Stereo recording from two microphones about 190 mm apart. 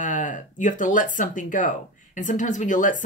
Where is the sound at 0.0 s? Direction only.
45° left (ahead or behind).